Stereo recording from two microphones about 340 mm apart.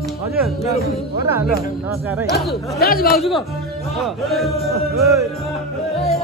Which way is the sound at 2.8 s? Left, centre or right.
Left.